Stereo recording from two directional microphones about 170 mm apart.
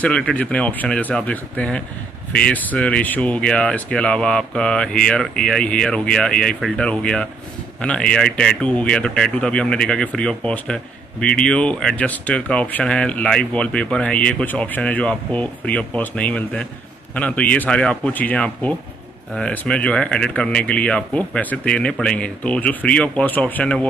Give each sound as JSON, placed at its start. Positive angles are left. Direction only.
{"t": 0.0, "sound": "speech", "side_deg": 5}